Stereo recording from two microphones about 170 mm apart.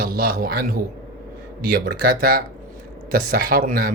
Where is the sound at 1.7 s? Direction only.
65° right (ahead or behind).